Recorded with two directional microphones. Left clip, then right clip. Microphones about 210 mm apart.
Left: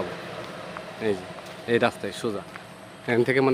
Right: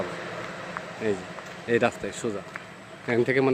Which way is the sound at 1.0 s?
5° left (ahead or behind).